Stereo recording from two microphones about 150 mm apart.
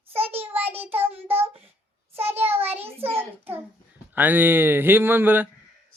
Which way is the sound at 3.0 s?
15° right (ahead or behind).